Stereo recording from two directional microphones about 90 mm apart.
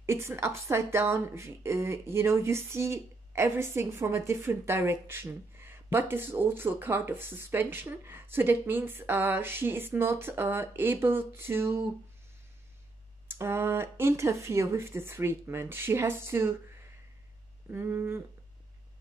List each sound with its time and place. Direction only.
0.0 s speech: 30° right (ahead or behind)
13.3 s speech: 25° right (ahead or behind)
17.6 s speech: 25° right (ahead or behind)